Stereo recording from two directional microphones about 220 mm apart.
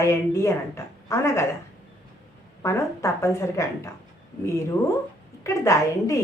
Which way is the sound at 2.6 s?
15° left (ahead or behind).